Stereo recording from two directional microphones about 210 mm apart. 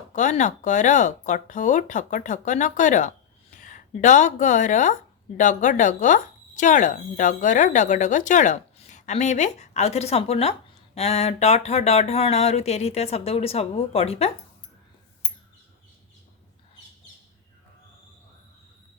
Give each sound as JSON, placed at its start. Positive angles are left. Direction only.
{"t": 0.1, "sound": "speech", "side_deg": 35}